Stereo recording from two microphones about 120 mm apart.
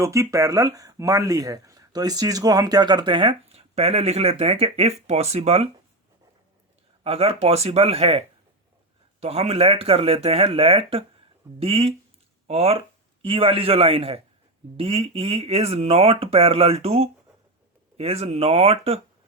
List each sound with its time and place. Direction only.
0.0 s speech: 25° right (ahead or behind); by 5.6 s 60° right (ahead or behind)
7.0 s speech: 55° right (ahead or behind)
9.2 s speech: 60° right (ahead or behind)